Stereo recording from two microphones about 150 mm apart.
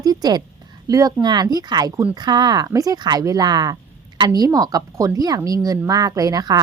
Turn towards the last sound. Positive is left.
turn(degrees=-25)  # may be behind; listen again after turning